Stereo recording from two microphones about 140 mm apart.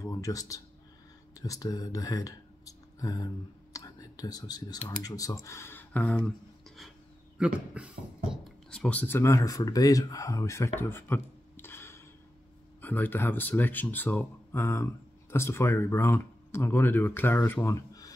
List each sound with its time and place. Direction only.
0.0 s speech: 25° left (ahead or behind)
7.3 s speech: 10° right (ahead or behind)
8.7 s speech: 10° left (ahead or behind)
17.6 s a sound: 25° left (ahead or behind)